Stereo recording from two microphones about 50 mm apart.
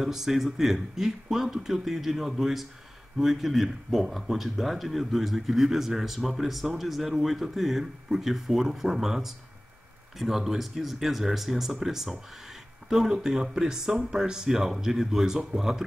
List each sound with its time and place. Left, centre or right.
0.0 s speech: centre